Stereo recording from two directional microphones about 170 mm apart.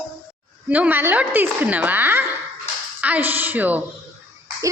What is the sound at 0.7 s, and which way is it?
A woman's voice, 10° right (ahead or behind).